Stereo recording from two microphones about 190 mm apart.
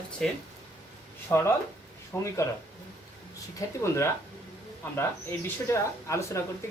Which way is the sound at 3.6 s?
15° left (ahead or behind).